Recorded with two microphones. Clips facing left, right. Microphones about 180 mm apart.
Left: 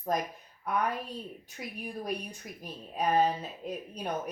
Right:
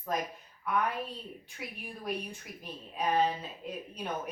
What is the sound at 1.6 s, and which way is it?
Speech, 40° left (ahead or behind).